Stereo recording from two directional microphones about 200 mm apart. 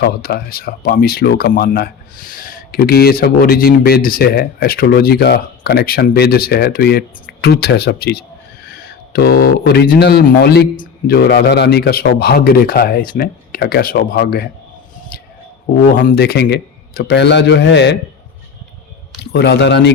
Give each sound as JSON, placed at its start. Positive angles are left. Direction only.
{"t": 0.0, "sound": "speech", "side_deg": 50}
{"t": 15.1, "sound": "a sound", "side_deg": 50}
{"t": 16.0, "sound": "a man's voice", "side_deg": 50}
{"t": 19.3, "sound": "a man's voice", "side_deg": 55}